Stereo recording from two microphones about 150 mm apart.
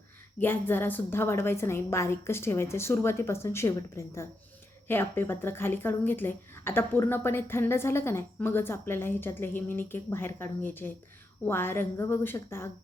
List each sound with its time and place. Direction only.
0.3 s speech: 15° left (ahead or behind)